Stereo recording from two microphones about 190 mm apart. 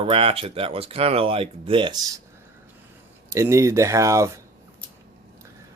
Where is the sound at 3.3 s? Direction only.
15° right (ahead or behind).